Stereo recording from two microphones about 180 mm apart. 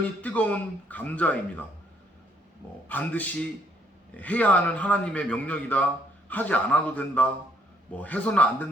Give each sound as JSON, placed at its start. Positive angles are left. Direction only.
{"t": 0.2, "sound": "a man's voice", "side_deg": 10}
{"t": 2.9, "sound": "a man's voice", "side_deg": 10}